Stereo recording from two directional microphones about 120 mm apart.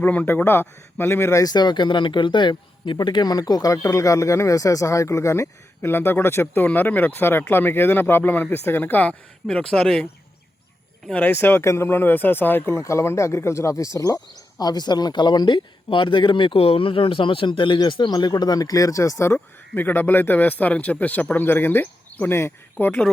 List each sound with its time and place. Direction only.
0.0 s speech: 15° left (ahead or behind)